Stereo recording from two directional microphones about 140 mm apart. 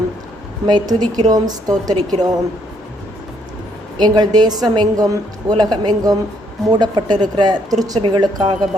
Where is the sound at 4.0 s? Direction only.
30° right (ahead or behind).